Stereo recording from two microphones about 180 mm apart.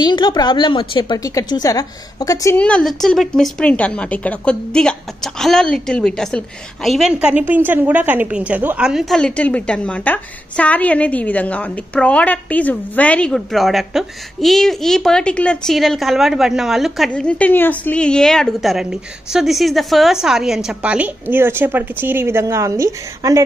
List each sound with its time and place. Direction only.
0.0 s a woman's voice: 25° left (ahead or behind)
2.5 s a woman's voice: 5° left (ahead or behind); by 23.4 s 15° right (ahead or behind)